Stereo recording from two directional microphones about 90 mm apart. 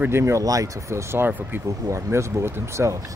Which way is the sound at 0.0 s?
30° right (ahead or behind).